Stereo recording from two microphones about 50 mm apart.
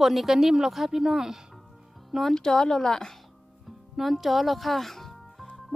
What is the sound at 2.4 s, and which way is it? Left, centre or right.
Speech, centre.